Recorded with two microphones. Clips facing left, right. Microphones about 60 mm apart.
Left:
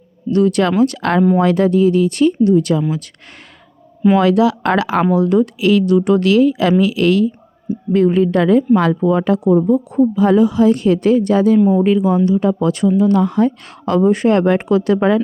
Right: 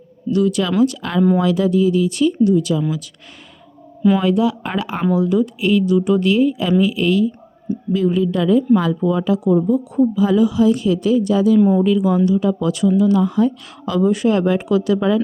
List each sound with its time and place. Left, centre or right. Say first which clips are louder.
0.3 s speech: left 3 dB; left
4.2 s speech: left 4 dB; left
5.1 s speech: left 1 dB; left
5.5 s a woman's voice: left 3 dB; left
7.9 s speech: left 5 dB; left
9.0 s speech: left 3 dB; left